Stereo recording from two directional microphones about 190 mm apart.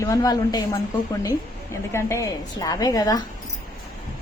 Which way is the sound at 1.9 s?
15° left (ahead or behind).